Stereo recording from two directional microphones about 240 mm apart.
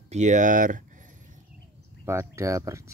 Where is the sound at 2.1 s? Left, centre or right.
Centre.